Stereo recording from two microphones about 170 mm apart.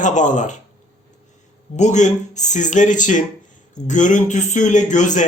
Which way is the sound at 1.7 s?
45° left (ahead or behind).